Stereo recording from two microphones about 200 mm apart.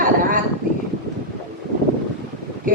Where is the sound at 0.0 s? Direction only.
45° right (ahead or behind).